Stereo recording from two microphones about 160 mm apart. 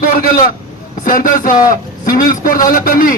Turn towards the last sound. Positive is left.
turn(degrees=60)  # may be behind; listen again after turning